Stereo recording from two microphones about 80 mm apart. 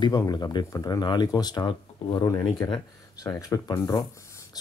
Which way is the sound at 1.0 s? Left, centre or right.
Left.